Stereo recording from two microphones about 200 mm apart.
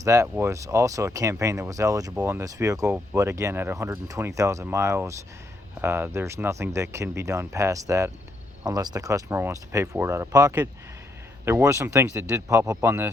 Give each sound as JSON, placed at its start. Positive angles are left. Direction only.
{"t": 0.0, "sound": "speech", "side_deg": -15}